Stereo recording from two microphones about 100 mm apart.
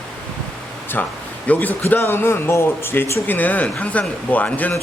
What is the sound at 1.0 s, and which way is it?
Speech, 15° left (ahead or behind).